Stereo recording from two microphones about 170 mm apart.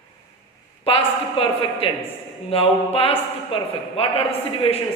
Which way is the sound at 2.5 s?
35° left (ahead or behind).